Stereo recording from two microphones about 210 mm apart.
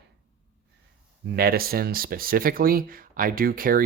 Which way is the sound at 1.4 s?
45° right (ahead or behind).